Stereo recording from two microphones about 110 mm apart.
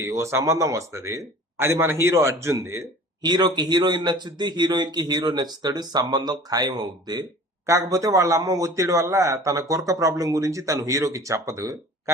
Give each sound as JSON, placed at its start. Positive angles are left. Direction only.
{"t": 0.0, "sound": "a man's voice", "side_deg": -25}
{"t": 3.2, "sound": "a man's voice", "side_deg": -40}